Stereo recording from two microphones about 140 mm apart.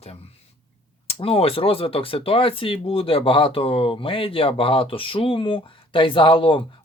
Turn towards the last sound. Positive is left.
turn(degrees=40)  # may be behind; listen again after turning